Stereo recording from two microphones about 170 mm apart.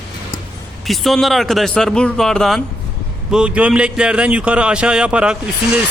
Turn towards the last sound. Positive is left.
turn(degrees=-5)  # may be behind; listen again after turning